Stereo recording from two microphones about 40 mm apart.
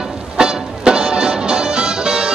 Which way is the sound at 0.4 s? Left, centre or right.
Centre.